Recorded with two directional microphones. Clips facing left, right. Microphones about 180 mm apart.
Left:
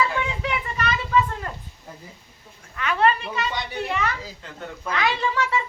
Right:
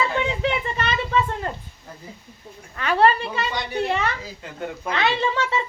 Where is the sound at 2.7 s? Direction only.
35° right (ahead or behind).